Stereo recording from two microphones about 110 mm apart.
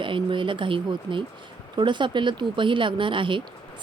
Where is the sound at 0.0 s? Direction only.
50° right (ahead or behind).